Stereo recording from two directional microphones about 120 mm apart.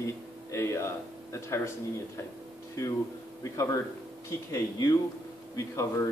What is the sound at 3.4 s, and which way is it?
Speech, 25° left (ahead or behind).